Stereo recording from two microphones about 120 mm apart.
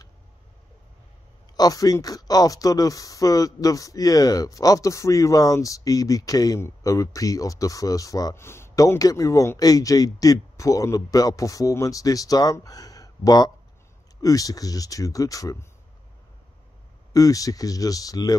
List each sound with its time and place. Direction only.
1.6 s speech: 30° left (ahead or behind)
17.1 s speech: 30° left (ahead or behind)